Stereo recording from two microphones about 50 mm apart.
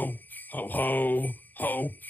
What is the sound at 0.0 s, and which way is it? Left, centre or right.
Jingle bell, left.